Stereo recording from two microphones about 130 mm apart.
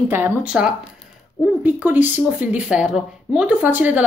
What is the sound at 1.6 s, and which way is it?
A woman's voice, 15° right (ahead or behind).